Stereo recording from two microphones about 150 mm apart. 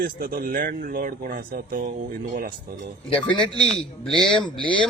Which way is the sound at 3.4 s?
5° left (ahead or behind).